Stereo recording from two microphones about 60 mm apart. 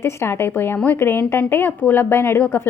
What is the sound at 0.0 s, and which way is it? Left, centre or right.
Speech, left.